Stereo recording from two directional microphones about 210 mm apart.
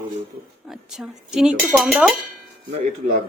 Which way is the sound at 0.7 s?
Centre (ahead or behind).